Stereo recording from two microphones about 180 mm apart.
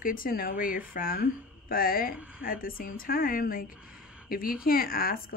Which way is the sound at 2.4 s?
55° left (ahead or behind).